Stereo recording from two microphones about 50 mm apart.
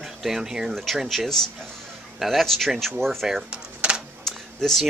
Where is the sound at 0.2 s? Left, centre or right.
Centre.